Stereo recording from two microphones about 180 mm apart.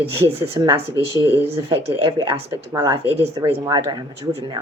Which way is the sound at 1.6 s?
30° right (ahead or behind).